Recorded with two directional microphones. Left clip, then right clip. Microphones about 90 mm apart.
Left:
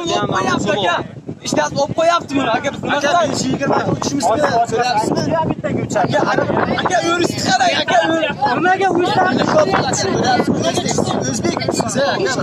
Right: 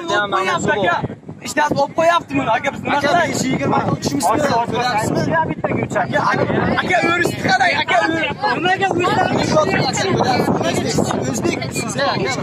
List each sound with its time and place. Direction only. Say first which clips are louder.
2.0 s speech: left 2 dB; 30° left (ahead or behind)
2.9 s speech: even; 10° left (ahead or behind)
5.9 s speech: left 2 dB; 30° left (ahead or behind)